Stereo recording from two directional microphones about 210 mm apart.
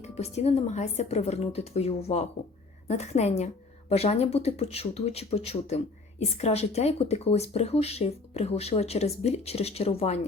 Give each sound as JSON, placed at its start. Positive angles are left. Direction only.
{"t": 0.2, "sound": "a woman's voice", "side_deg": 30}